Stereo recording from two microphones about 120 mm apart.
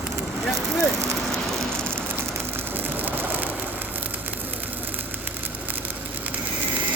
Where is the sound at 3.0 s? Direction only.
15° right (ahead or behind).